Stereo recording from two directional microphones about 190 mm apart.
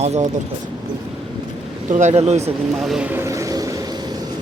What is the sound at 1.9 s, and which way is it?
Speech, 40° right (ahead or behind).